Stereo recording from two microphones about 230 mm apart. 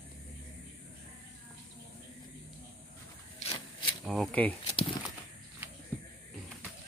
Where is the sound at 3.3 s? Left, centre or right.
Left.